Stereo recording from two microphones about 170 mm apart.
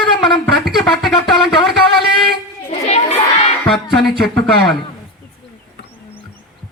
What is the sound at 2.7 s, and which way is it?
Children playing, 40° left (ahead or behind).